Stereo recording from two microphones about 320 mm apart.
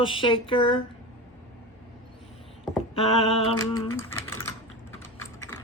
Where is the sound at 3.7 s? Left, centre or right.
Centre.